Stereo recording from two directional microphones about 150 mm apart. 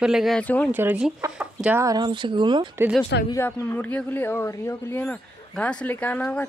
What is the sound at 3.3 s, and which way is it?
Speech, 20° left (ahead or behind).